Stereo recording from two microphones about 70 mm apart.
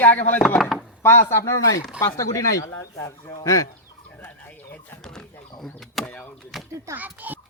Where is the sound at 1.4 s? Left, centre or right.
Left.